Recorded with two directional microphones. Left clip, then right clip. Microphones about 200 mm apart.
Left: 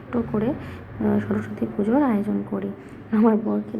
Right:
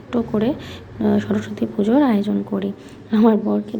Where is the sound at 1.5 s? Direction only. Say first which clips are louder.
Right 4 dB; 35° right (ahead or behind).